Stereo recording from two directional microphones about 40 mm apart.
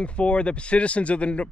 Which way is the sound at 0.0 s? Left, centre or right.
Left.